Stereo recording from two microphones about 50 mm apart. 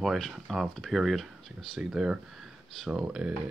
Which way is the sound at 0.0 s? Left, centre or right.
Centre.